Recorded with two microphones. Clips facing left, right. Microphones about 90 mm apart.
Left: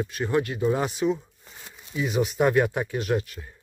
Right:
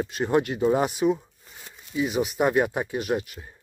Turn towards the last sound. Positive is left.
turn(degrees=-15)  # may be behind; listen again after turning